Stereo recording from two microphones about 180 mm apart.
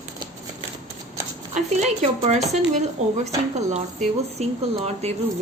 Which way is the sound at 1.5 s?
40° right (ahead or behind).